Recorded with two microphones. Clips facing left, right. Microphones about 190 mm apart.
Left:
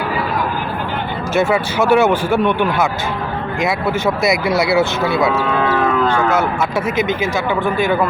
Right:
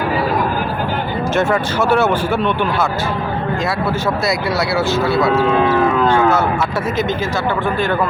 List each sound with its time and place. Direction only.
1.4 s speech: 10° left (ahead or behind)
4.0 s speech: 20° left (ahead or behind)